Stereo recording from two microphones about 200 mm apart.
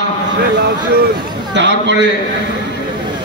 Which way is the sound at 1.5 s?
60° right (ahead or behind).